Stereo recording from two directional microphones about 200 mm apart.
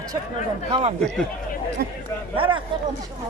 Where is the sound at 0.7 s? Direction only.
25° right (ahead or behind).